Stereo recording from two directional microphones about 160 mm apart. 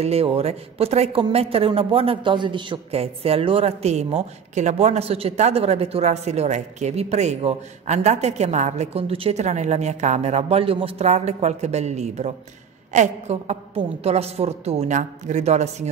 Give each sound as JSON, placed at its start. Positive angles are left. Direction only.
{"t": 0.0, "sound": "a man's voice", "side_deg": -40}